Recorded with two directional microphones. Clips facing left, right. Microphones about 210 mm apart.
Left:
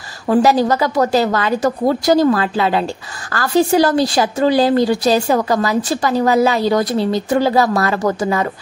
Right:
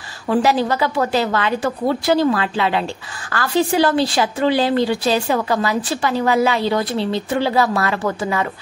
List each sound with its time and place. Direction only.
0.3 s a woman's voice: 40° left (ahead or behind)